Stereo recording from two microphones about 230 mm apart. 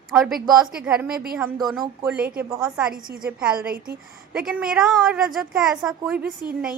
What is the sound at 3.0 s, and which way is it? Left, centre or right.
Speech, right.